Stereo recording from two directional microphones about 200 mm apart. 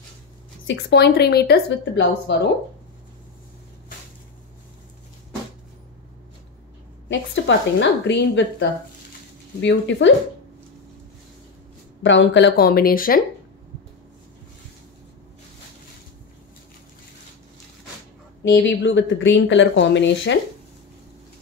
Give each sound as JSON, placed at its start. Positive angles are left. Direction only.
{"t": 0.7, "sound": "speech", "side_deg": 60}
{"t": 7.1, "sound": "speech", "side_deg": 65}
{"t": 12.0, "sound": "speech", "side_deg": 65}
{"t": 18.4, "sound": "speech", "side_deg": 65}